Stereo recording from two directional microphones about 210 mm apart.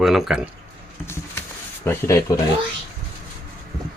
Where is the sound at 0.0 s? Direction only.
Centre (ahead or behind).